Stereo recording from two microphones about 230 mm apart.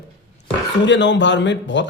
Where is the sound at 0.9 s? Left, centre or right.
Left.